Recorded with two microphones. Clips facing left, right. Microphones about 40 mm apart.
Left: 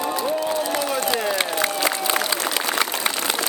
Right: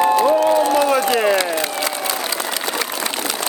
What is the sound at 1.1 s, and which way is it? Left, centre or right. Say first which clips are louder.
Speech: right 6 dB; right.